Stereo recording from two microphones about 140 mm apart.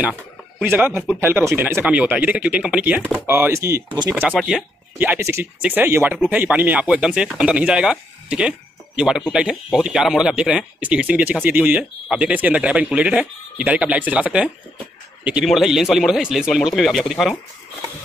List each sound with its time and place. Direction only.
0.0 s speech: 10° right (ahead or behind)
4.1 s speech: centre (ahead or behind)
4.9 s speech: 15° right (ahead or behind)